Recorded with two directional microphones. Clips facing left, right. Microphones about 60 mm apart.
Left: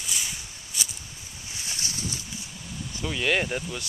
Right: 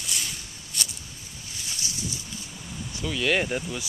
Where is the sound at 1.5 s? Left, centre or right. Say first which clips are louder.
Left 1 dB; left.